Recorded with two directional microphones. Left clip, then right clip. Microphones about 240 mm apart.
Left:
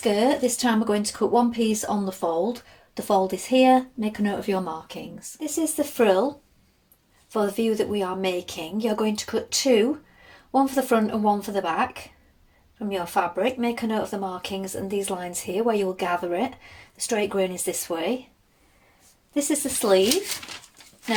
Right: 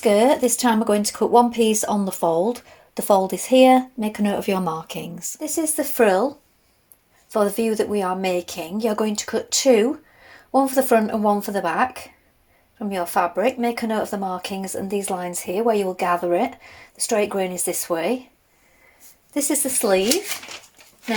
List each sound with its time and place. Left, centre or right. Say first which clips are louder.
0.0 s speech: right 5 dB; right
6.0 s speech: right 3 dB; centre
7.3 s speech: right 3 dB; right
13.4 s speech: right 4 dB; right
19.3 s speech: right 2 dB; right